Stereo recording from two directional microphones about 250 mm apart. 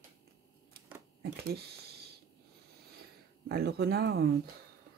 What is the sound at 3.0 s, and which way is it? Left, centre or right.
Speech, right.